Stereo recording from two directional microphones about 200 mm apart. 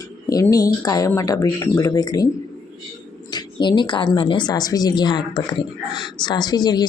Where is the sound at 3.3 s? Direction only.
20° left (ahead or behind).